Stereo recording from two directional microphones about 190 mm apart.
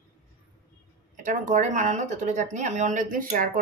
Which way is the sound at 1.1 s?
40° right (ahead or behind).